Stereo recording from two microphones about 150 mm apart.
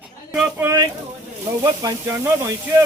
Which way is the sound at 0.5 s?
20° right (ahead or behind).